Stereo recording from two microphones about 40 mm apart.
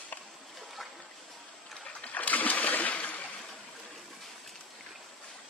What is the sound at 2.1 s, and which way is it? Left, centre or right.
Splash, left.